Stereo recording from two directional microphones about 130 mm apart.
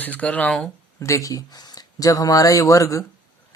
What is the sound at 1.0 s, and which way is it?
Speech, 25° left (ahead or behind).